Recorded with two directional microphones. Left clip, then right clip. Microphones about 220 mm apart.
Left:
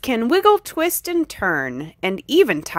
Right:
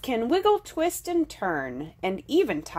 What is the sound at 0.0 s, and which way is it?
A woman's voice, 30° left (ahead or behind).